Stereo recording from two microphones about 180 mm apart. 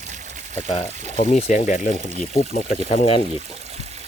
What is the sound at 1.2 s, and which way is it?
Speech, 40° left (ahead or behind).